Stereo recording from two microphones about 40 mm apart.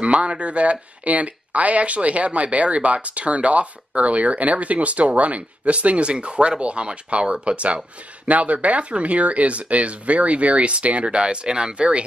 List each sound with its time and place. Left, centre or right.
0.0 s speech: right